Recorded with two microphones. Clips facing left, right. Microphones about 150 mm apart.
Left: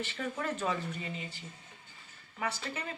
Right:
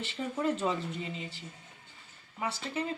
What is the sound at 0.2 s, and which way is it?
Speech, 20° right (ahead or behind).